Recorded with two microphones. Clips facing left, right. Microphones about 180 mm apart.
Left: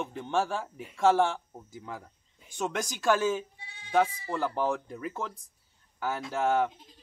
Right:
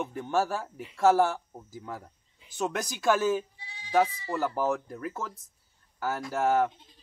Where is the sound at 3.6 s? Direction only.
55° left (ahead or behind).